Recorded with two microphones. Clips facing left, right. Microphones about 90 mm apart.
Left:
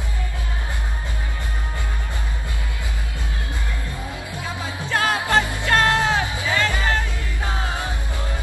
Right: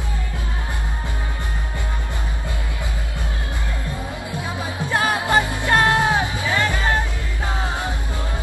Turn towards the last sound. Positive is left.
turn(degrees=-20)  # may be behind; listen again after turning